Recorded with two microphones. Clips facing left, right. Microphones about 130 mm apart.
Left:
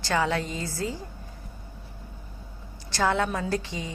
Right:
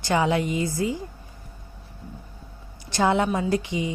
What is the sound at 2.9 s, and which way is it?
A woman's voice, 20° right (ahead or behind).